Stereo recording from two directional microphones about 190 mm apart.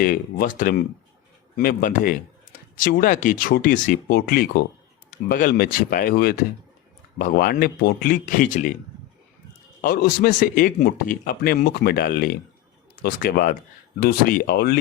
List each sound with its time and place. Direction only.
0.0 s a man's voice: 45° left (ahead or behind)
9.8 s a man's voice: 50° left (ahead or behind)